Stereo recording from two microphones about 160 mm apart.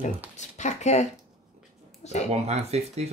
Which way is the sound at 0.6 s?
45° left (ahead or behind).